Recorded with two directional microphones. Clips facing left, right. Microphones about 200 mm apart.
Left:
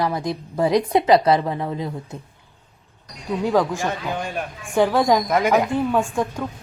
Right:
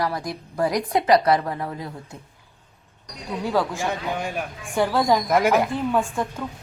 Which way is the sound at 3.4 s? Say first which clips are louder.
Left 4 dB; 15° left (ahead or behind).